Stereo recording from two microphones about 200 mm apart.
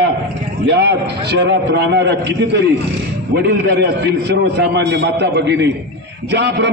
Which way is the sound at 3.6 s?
55° right (ahead or behind).